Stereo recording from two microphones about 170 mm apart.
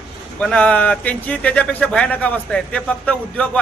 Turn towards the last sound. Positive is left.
turn(degrees=10)  # may be behind; listen again after turning